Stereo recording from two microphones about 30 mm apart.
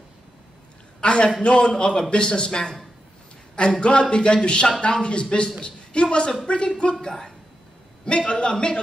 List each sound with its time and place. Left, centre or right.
1.0 s a sound: left
1.4 s a man's voice: left
3.8 s a man's voice: left
8.1 s a man's voice: left